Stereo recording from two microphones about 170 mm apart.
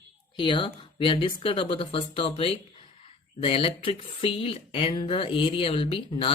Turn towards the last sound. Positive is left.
turn(degrees=35)  # may be behind; listen again after turning